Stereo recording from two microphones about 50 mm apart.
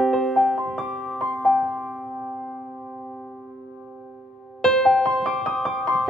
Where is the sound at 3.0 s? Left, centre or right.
Centre.